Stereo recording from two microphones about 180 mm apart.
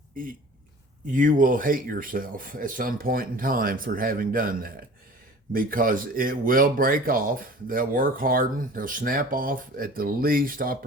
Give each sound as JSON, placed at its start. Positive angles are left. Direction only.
{"t": 1.0, "sound": "speech", "side_deg": -45}